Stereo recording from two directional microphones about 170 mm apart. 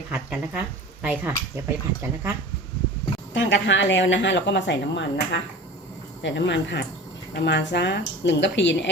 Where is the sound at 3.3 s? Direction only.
90° left.